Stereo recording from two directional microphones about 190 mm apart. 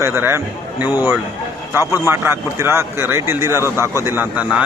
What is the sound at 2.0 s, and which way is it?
Speech, 15° right (ahead or behind).